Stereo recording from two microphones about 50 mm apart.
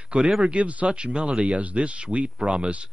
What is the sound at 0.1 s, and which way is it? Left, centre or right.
Speech, centre.